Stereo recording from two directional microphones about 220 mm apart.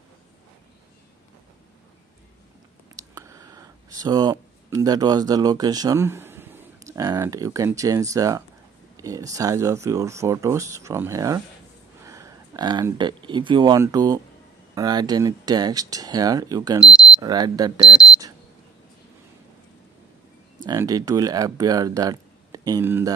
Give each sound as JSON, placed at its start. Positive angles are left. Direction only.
{"t": 3.0, "sound": "speech", "side_deg": -15}
{"t": 16.8, "sound": "speech", "side_deg": -5}
{"t": 17.2, "sound": "speech", "side_deg": -15}
{"t": 20.6, "sound": "speech", "side_deg": -15}